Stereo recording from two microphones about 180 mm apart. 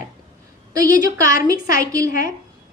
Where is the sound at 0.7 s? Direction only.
20° right (ahead or behind).